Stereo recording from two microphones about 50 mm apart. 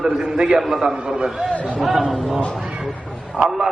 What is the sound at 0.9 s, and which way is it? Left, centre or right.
Speech, right.